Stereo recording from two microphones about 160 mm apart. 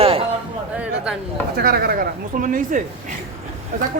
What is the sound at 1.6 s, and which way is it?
Speech, 75° right (ahead or behind).